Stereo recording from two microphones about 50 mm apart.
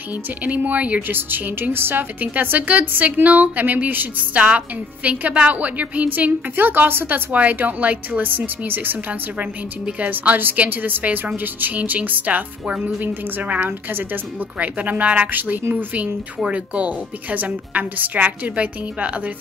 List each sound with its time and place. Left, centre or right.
0.4 s speech: right
1.1 s a woman's voice: right
2.1 s speech: right
7.3 s speech: right
9.4 s a woman's voice: right
10.1 s speech: right
14.8 s a woman's voice: right